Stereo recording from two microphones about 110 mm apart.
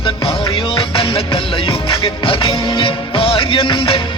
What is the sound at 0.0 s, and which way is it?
Music, 55° left (ahead or behind).